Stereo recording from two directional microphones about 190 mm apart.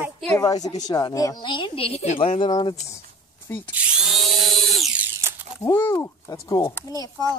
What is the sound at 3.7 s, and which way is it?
Drill, 5° right (ahead or behind).